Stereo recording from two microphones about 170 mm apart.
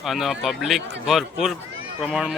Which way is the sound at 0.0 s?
Centre (ahead or behind).